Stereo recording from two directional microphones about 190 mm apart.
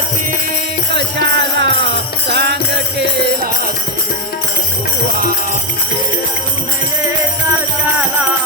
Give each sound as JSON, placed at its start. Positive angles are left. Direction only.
{"t": 0.9, "sound": "music", "side_deg": -65}